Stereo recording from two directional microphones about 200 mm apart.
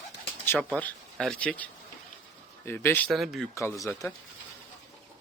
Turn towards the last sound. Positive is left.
turn(degrees=15)  # may be behind; listen again after turning